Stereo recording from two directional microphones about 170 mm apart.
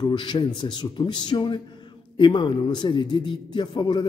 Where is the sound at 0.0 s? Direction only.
25° left (ahead or behind).